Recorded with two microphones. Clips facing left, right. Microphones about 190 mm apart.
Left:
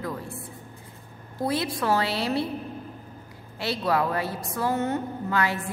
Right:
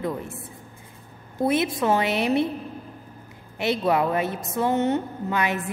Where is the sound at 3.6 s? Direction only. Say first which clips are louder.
Right 3 dB; 20° right (ahead or behind).